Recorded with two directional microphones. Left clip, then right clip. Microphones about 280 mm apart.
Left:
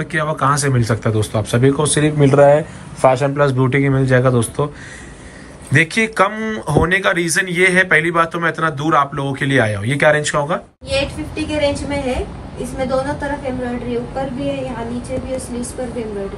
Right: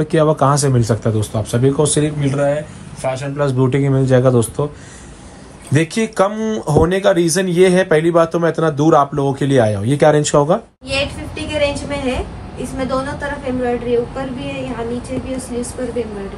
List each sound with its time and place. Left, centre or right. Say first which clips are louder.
0.1 s speech: right 2 dB; centre
2.1 s speech: left 7 dB; centre
5.7 s speech: left 3 dB; centre
10.9 s a woman's voice: even; centre